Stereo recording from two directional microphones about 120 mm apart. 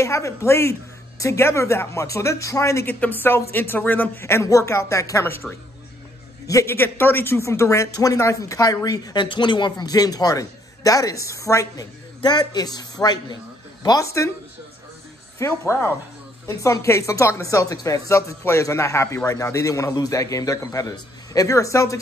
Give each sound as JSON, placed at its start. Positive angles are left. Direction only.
{"t": 0.0, "sound": "speech", "side_deg": 25}
{"t": 15.3, "sound": "speech", "side_deg": 20}